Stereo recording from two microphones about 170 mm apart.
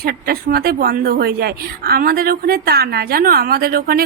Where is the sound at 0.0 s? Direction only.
60° right (ahead or behind).